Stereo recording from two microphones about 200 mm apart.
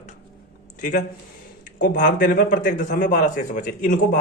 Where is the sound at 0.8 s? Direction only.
40° left (ahead or behind).